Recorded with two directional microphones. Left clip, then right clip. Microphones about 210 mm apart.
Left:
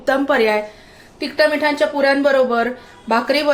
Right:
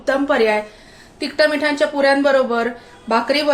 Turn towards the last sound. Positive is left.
turn(degrees=10)  # may be behind; listen again after turning